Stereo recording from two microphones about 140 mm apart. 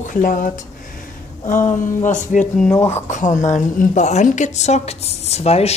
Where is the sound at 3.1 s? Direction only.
60° left (ahead or behind).